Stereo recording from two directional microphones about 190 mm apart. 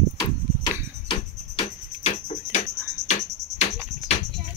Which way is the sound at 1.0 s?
25° left (ahead or behind).